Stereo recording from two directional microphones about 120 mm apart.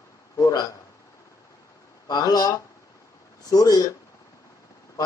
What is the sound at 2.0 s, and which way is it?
Speech, 30° left (ahead or behind).